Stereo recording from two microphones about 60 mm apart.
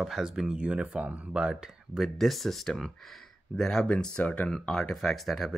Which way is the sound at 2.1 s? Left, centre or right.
Centre.